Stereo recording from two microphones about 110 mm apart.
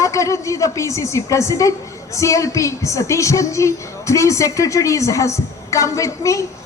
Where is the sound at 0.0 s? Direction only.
30° left (ahead or behind).